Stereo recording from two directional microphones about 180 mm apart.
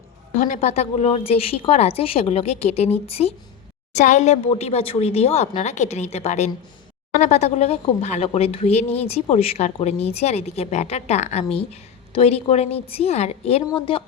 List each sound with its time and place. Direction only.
0.4 s a woman's voice: 40° left (ahead or behind)